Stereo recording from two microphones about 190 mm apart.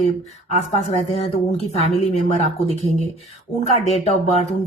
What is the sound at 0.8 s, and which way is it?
A woman's voice, 35° left (ahead or behind).